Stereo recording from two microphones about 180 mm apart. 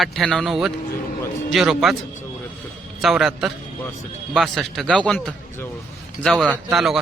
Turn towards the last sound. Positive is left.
turn(degrees=0)  # may be behind; listen again after turning